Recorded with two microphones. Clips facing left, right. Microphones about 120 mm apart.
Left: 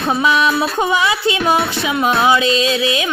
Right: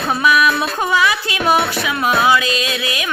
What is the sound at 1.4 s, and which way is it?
Music, 5° right (ahead or behind).